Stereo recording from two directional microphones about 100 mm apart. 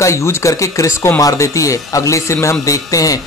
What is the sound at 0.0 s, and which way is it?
A man's voice, 30° left (ahead or behind).